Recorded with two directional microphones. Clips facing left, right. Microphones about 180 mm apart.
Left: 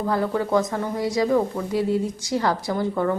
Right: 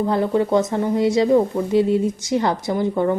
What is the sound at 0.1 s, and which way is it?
Speech, 20° right (ahead or behind).